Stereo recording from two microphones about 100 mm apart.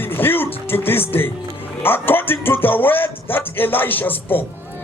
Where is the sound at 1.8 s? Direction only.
20° left (ahead or behind).